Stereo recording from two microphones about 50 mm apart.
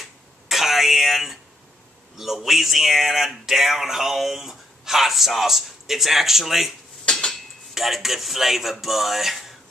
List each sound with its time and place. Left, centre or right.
0.0 s a sound: centre
2.1 s speech: centre
7.1 s dishes: centre
7.7 s speech: centre